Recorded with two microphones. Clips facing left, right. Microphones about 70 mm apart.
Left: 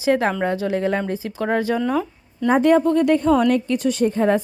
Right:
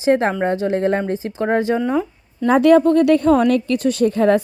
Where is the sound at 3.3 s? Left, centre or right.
Right.